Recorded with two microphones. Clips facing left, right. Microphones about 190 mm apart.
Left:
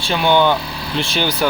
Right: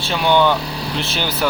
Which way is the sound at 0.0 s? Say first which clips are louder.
Left 1 dB; centre (ahead or behind).